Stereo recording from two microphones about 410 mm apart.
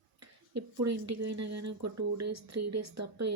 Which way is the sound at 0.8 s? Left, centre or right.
Right.